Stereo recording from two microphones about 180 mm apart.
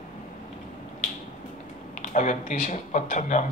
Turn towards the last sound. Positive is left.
turn(degrees=45)  # may be behind; listen again after turning